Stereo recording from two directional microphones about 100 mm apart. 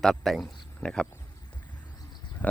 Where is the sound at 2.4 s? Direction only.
15° left (ahead or behind).